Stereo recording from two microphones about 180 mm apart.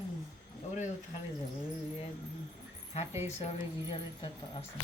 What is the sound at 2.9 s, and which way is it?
A woman's voice, 35° left (ahead or behind).